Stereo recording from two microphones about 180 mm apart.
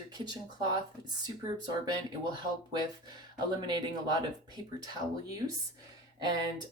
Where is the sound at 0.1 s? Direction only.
25° right (ahead or behind).